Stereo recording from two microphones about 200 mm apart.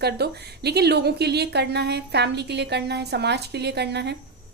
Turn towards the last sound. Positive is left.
turn(degrees=-55)  # may be behind; listen again after turning